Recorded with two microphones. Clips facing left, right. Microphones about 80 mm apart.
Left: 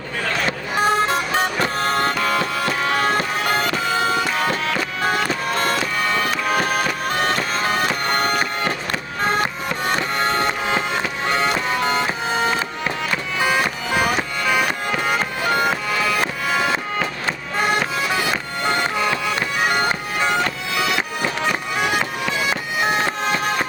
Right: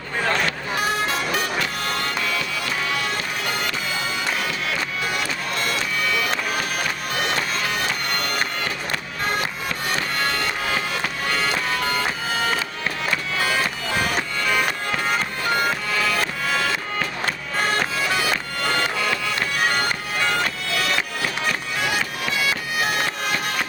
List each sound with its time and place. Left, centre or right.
0.8 s vehicle: left
5.0 s music: left
10.2 s music: left